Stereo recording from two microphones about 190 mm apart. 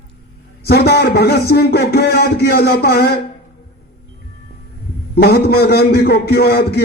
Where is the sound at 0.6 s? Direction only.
55° left (ahead or behind).